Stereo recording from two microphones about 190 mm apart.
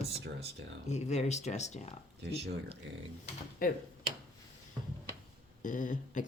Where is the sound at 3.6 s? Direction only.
50° left (ahead or behind).